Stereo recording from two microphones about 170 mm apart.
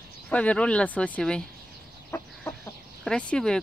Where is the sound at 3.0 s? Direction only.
5° left (ahead or behind).